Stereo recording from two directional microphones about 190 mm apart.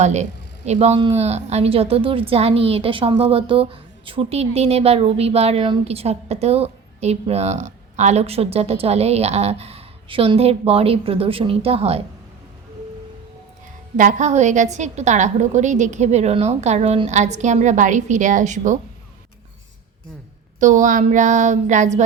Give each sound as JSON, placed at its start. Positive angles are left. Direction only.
{"t": 0.0, "sound": "a woman's voice", "side_deg": -35}
{"t": 13.9, "sound": "a woman's voice", "side_deg": -40}
{"t": 20.6, "sound": "a woman's voice", "side_deg": -40}